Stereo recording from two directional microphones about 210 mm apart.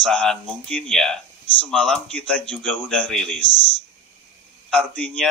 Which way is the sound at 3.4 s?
55° right (ahead or behind).